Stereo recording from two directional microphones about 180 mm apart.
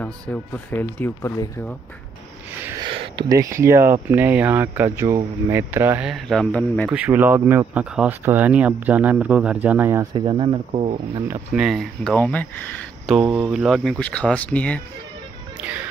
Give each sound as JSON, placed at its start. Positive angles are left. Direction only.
{"t": 0.0, "sound": "speech", "side_deg": 10}
{"t": 2.8, "sound": "speech", "side_deg": -30}
{"t": 6.9, "sound": "speech", "side_deg": -10}
{"t": 10.1, "sound": "speech", "side_deg": -25}
{"t": 11.5, "sound": "speech", "side_deg": 0}
{"t": 13.0, "sound": "speech", "side_deg": 0}